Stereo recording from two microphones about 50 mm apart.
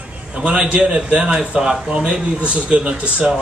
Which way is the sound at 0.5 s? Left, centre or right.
Right.